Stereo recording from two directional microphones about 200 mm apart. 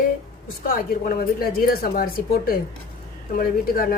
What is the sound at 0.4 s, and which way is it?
Speech, 45° left (ahead or behind).